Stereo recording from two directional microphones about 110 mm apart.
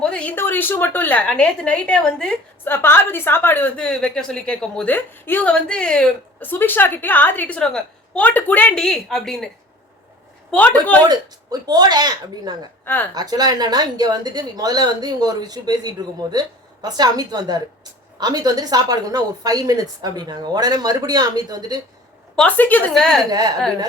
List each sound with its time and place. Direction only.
0.0 s a woman's voice: 10° left (ahead or behind)
2.6 s a woman's voice: 20° left (ahead or behind)
6.4 s a woman's voice: 20° left (ahead or behind)
8.8 s a woman's voice: 5° left (ahead or behind)
10.5 s a woman's voice: 15° left (ahead or behind)
11.6 s a woman's voice: 40° right (ahead or behind)
12.8 s speech: 20° left (ahead or behind)
13.1 s a woman's voice: 35° right (ahead or behind)
22.4 s a woman's voice: 15° left (ahead or behind)
22.9 s a woman's voice: 5° left (ahead or behind)
23.3 s a woman's voice: 35° right (ahead or behind)